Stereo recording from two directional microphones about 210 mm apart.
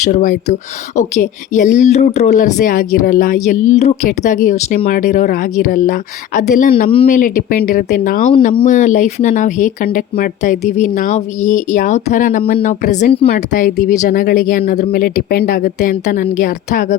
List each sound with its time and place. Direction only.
0.0 s a woman's voice: 40° left (ahead or behind)